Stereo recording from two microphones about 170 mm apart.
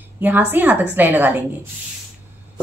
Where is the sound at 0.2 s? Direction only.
10° right (ahead or behind).